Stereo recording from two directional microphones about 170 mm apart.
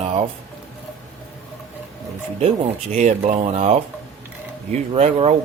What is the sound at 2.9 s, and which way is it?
Speech, 45° right (ahead or behind).